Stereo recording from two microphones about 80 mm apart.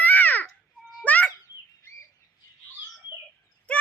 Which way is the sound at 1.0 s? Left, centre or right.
Centre.